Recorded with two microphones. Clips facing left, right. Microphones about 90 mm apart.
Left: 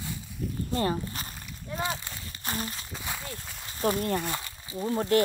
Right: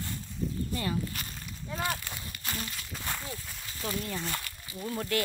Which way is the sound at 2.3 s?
35° left (ahead or behind).